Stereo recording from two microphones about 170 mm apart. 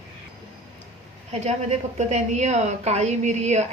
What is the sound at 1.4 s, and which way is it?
A woman's voice, 40° right (ahead or behind).